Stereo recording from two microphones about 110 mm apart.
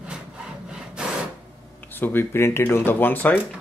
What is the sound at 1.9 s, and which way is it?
Speech, 20° left (ahead or behind).